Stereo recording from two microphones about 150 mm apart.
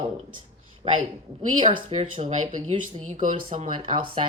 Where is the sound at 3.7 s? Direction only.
35° right (ahead or behind).